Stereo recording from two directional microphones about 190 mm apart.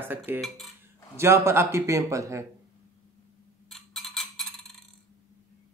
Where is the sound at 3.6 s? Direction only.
Centre (ahead or behind).